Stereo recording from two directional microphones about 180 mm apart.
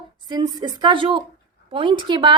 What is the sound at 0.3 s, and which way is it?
A woman's voice, 20° right (ahead or behind).